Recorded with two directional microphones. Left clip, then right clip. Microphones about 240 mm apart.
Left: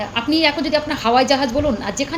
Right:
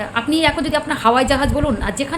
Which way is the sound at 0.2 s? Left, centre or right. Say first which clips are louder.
Even; centre.